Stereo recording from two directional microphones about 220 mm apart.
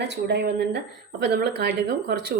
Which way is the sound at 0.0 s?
50° right (ahead or behind).